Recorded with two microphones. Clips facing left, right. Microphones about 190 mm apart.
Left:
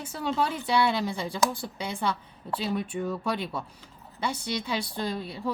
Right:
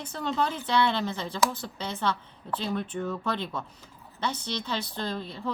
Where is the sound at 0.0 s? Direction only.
10° left (ahead or behind).